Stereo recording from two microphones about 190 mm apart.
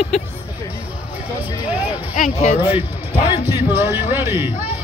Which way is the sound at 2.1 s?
45° left (ahead or behind).